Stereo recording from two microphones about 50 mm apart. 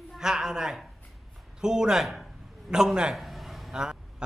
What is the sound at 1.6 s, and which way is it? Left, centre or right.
A man's voice, centre.